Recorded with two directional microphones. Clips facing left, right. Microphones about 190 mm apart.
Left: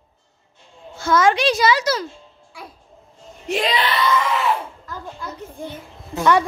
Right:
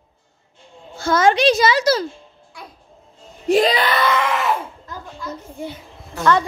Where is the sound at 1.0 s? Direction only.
30° right (ahead or behind).